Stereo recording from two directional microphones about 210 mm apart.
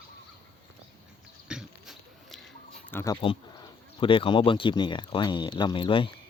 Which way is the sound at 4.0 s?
25° left (ahead or behind).